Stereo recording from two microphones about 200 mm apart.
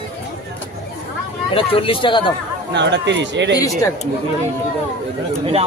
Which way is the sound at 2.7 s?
60° right (ahead or behind).